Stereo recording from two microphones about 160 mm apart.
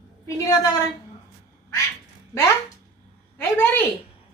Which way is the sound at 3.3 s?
10° left (ahead or behind).